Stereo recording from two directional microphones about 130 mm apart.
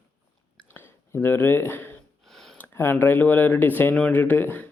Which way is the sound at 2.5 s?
15° left (ahead or behind).